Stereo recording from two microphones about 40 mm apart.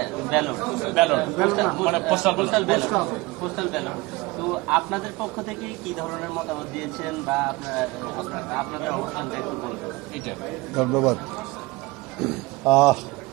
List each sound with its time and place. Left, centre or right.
0.0 s a man's voice: centre
10.8 s a man's voice: centre
12.2 s speech: centre